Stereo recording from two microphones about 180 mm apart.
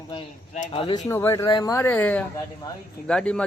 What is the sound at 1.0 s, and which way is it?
Speech, 15° left (ahead or behind).